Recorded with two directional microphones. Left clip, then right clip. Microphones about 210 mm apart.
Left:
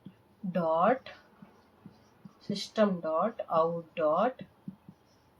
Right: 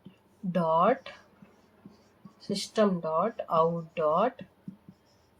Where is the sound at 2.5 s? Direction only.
50° right (ahead or behind).